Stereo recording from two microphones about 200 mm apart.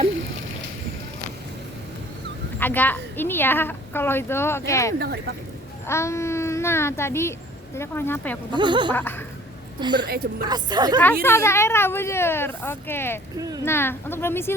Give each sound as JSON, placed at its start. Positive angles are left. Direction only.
{"t": 2.6, "sound": "a woman's voice", "side_deg": 10}
{"t": 4.9, "sound": "speech", "side_deg": -55}
{"t": 5.9, "sound": "a woman's voice", "side_deg": 15}
{"t": 8.5, "sound": "a woman's voice", "side_deg": -25}
{"t": 8.9, "sound": "a woman's voice", "side_deg": 10}
{"t": 9.8, "sound": "a woman's voice", "side_deg": -20}
{"t": 11.0, "sound": "a woman's voice", "side_deg": 15}